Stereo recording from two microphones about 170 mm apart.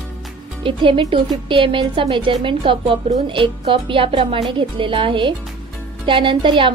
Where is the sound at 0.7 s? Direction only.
30° right (ahead or behind).